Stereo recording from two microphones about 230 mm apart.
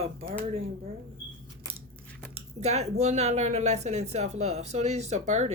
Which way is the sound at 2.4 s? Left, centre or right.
Right.